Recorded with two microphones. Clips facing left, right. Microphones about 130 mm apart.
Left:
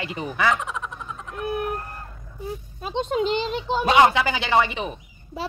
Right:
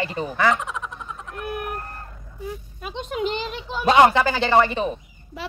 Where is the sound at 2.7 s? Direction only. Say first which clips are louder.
Left 5 dB; 30° left (ahead or behind).